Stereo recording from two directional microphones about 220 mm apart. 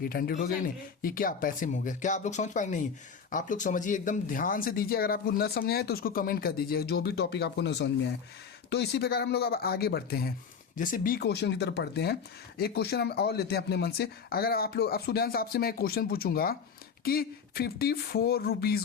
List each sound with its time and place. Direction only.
0.0 s speech: 40° left (ahead or behind)